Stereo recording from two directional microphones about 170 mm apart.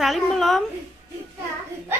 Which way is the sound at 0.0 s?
Centre (ahead or behind).